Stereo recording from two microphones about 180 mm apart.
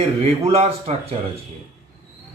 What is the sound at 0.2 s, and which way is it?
Speech, 35° right (ahead or behind).